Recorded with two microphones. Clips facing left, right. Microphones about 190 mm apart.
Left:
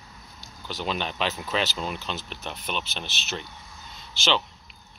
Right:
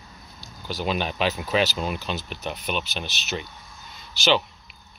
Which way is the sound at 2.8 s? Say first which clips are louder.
Right 3 dB; 25° left (ahead or behind).